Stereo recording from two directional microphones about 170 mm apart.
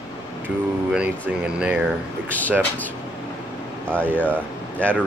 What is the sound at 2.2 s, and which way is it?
Speech, 10° left (ahead or behind).